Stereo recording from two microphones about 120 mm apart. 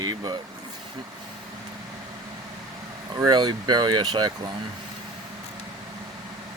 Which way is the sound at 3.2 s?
40° right (ahead or behind).